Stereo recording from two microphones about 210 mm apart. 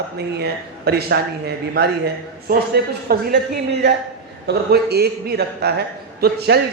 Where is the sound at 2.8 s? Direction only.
50° right (ahead or behind).